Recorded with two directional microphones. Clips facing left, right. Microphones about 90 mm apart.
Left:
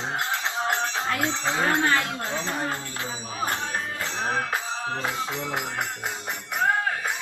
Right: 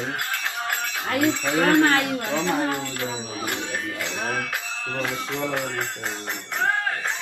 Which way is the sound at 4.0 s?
30° left (ahead or behind).